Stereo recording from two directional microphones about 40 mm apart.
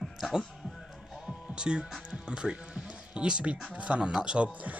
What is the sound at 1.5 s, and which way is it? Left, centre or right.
Speech, right.